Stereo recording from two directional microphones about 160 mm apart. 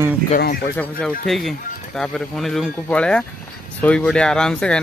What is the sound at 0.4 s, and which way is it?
Speech, 70° left (ahead or behind).